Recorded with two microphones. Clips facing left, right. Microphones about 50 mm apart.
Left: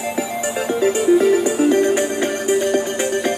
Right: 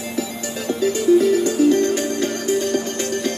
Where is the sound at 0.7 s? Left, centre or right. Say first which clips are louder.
Left 1 dB; left.